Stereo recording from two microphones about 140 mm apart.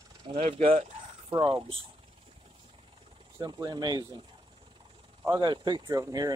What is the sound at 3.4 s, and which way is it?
Speech, 30° right (ahead or behind).